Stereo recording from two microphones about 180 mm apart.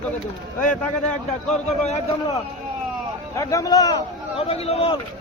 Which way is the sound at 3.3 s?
15° left (ahead or behind).